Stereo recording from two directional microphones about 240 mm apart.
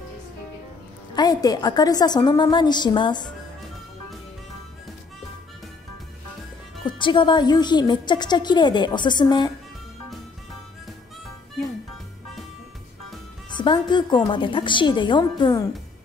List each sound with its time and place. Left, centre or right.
1.1 s a woman's voice: centre
7.0 s a woman's voice: centre
13.5 s a woman's voice: centre